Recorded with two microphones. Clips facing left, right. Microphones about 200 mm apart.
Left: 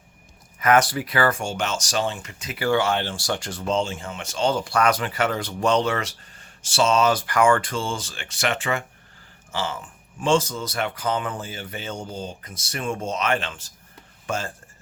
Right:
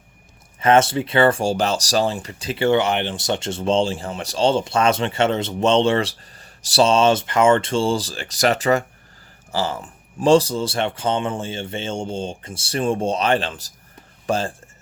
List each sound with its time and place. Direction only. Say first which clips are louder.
0.6 s speech: right 3 dB; 25° right (ahead or behind)